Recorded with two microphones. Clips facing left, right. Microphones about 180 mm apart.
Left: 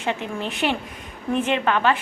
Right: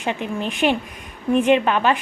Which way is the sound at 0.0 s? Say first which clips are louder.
Right 2 dB; 15° right (ahead or behind).